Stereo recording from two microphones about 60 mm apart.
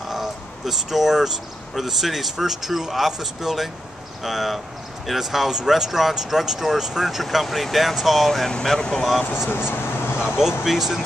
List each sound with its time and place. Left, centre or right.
0.1 s speech: centre
9.5 s a sound: left
10.3 s speech: centre